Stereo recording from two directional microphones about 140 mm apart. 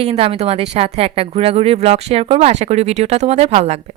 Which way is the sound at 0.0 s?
45° right (ahead or behind).